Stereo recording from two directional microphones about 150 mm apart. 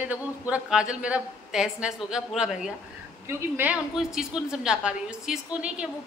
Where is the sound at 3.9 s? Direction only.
5° right (ahead or behind).